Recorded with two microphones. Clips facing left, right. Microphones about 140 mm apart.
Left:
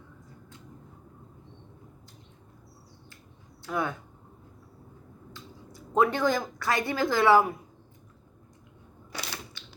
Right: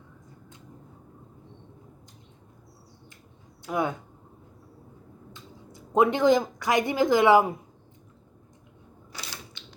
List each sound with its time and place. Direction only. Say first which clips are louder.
3.6 s speech: right 3 dB; 20° right (ahead or behind)
5.3 s speech: left 2 dB; 20° right (ahead or behind)
9.1 s typewriter: left 4 dB; 70° left (ahead or behind)
9.6 s typewriter: right 1 dB; 20° right (ahead or behind)